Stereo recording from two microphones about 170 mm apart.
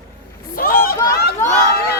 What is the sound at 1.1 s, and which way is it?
Run, 65° left (ahead or behind).